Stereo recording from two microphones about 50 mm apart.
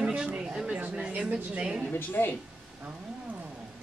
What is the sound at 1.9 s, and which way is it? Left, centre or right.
Speech, left.